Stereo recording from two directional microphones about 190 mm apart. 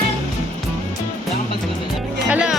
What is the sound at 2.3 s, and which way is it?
Speech, 5° right (ahead or behind).